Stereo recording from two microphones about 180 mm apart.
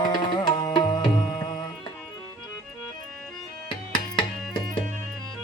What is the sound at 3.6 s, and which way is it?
Music, 25° left (ahead or behind).